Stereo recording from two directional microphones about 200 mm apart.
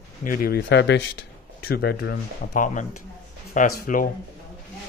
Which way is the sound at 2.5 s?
40° left (ahead or behind).